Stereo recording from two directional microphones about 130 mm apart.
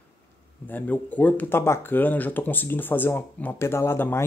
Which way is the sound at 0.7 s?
15° left (ahead or behind).